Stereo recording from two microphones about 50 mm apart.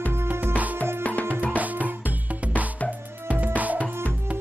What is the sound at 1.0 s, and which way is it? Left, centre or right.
Music, left.